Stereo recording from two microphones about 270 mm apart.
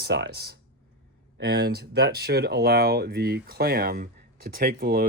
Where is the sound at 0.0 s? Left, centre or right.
Right.